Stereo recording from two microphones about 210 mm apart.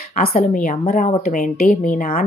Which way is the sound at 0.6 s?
40° left (ahead or behind).